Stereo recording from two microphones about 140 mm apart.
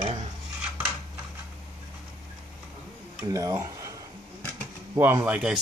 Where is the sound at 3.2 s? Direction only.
25° right (ahead or behind).